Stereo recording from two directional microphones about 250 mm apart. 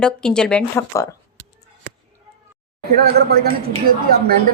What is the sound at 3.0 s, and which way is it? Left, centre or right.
Speech, right.